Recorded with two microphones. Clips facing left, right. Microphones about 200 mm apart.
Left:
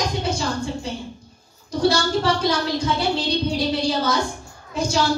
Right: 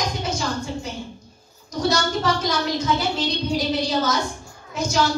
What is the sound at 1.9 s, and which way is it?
A woman's voice, 30° left (ahead or behind).